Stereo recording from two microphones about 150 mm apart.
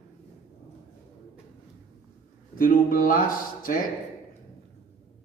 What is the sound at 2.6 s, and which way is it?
Speech, 70° left (ahead or behind).